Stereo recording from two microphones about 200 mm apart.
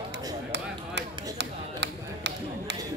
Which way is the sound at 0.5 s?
60° right (ahead or behind).